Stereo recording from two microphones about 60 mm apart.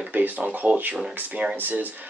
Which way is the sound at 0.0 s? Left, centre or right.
Right.